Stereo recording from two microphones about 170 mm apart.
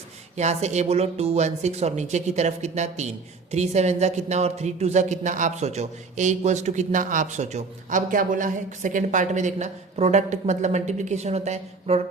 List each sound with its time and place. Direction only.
0.3 s speech: 40° right (ahead or behind)